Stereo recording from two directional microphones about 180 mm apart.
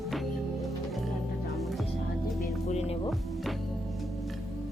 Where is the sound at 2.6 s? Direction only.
35° left (ahead or behind).